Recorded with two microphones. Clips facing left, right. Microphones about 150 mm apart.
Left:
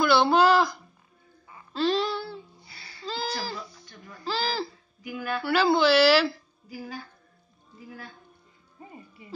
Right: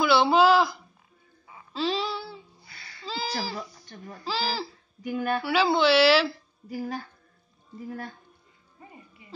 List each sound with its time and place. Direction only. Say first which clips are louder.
0.0 s a sound: even; centre (ahead or behind)
2.6 s music: even; 30° left (ahead or behind)
3.0 s a sound: left 1 dB; centre (ahead or behind)
3.9 s speech: right 5 dB; 45° right (ahead or behind)
4.2 s speech: left 1 dB; 5° right (ahead or behind)
5.0 s speech: right 4 dB; 45° right (ahead or behind)
5.4 s speech: left 2 dB; centre (ahead or behind)
6.7 s speech: right 6 dB; 40° right (ahead or behind)